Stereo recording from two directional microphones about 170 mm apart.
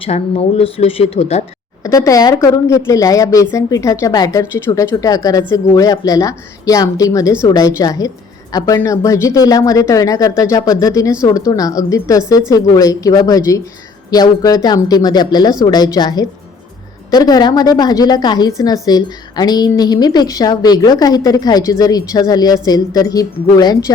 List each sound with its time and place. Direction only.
0.0 s speech: 35° left (ahead or behind)
1.8 s a woman's voice: 20° left (ahead or behind)